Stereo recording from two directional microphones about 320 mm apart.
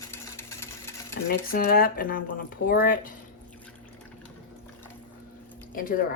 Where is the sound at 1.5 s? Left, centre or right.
Left.